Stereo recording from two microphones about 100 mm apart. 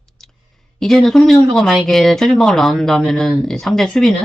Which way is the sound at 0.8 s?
5° left (ahead or behind).